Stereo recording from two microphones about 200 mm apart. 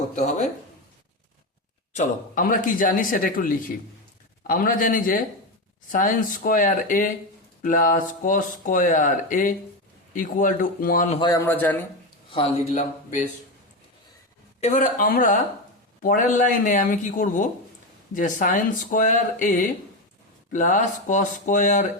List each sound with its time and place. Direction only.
0.2 s speech: 35° left (ahead or behind)
1.9 s speech: 40° left (ahead or behind)
11.2 s a man's voice: 15° left (ahead or behind)
12.3 s speech: 30° left (ahead or behind)
14.6 s speech: 40° left (ahead or behind)